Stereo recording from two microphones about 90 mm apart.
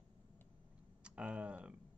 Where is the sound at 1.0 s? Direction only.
10° right (ahead or behind).